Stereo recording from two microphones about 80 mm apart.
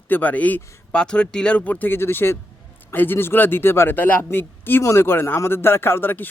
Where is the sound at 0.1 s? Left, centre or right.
Left.